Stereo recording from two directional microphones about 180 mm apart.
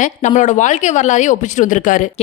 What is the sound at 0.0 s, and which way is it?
Speech, 40° left (ahead or behind).